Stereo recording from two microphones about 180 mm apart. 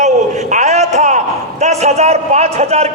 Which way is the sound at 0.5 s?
40° right (ahead or behind).